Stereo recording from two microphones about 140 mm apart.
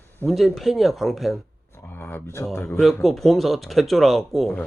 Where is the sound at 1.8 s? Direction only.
15° left (ahead or behind).